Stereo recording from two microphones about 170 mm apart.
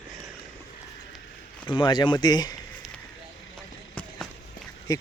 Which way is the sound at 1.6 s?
25° left (ahead or behind).